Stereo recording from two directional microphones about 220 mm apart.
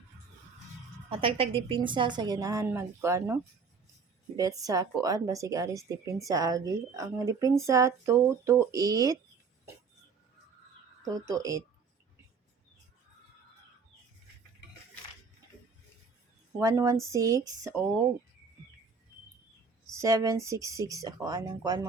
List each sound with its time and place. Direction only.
1.2 s speech: 25° right (ahead or behind)
11.0 s speech: 15° right (ahead or behind)
16.6 s speech: 15° right (ahead or behind)
19.9 s speech: 15° right (ahead or behind)